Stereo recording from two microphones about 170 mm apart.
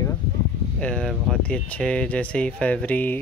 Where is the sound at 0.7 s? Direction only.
5° left (ahead or behind).